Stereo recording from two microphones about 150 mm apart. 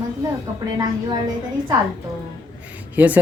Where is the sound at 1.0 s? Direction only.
30° right (ahead or behind).